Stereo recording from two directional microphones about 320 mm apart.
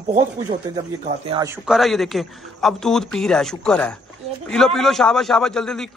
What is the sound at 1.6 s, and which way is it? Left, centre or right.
A man's voice, centre.